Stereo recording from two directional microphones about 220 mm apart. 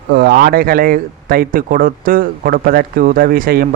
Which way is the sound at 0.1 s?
45° right (ahead or behind).